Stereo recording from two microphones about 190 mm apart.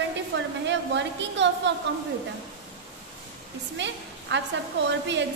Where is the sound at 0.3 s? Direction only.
70° right (ahead or behind).